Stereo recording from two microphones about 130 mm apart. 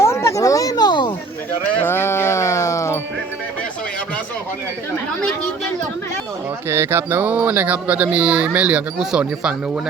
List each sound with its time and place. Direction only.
0.0 s a sound: 20° left (ahead or behind)
1.8 s sheep: 20° left (ahead or behind)
6.7 s speech: 20° right (ahead or behind)